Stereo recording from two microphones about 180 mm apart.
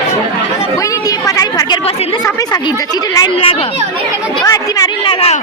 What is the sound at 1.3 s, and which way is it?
Speech, 20° left (ahead or behind).